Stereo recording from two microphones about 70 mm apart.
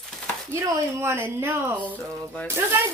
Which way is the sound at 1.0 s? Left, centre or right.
Right.